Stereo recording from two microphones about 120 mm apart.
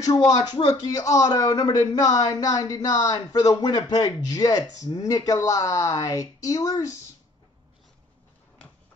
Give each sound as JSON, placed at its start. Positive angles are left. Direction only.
{"t": 0.0, "sound": "a man's voice", "side_deg": 30}